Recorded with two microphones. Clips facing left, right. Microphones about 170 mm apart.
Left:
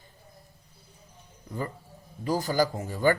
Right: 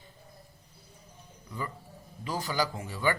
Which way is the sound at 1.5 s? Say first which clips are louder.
Left 4 dB; 45° left (ahead or behind).